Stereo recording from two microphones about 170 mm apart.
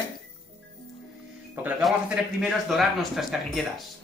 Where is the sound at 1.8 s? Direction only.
Centre (ahead or behind).